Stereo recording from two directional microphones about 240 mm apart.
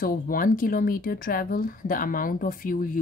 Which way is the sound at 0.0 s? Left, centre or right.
Left.